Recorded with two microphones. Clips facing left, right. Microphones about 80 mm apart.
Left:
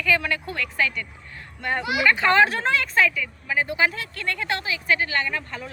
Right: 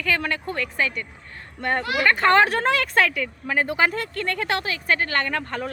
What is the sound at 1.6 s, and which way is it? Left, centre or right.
Speech, right.